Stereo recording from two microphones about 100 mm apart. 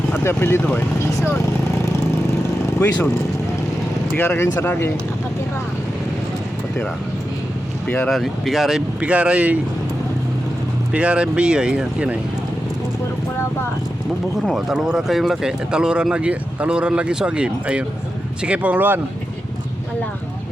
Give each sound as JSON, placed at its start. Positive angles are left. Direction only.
{"t": 0.3, "sound": "speech", "side_deg": 25}
{"t": 1.1, "sound": "vehicle", "side_deg": 25}
{"t": 2.7, "sound": "speech", "side_deg": 20}
{"t": 4.2, "sound": "speech", "side_deg": 20}
{"t": 7.9, "sound": "speech", "side_deg": 15}
{"t": 8.1, "sound": "speech", "side_deg": 0}
{"t": 9.0, "sound": "speech", "side_deg": -10}
{"t": 10.9, "sound": "speech", "side_deg": -10}
{"t": 14.5, "sound": "speech", "side_deg": -5}